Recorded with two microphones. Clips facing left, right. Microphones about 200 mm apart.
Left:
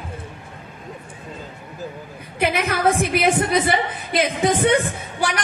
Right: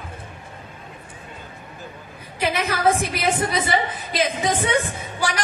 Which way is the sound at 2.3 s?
55° left (ahead or behind).